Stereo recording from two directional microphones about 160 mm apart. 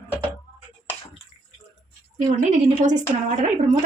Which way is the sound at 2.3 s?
50° right (ahead or behind).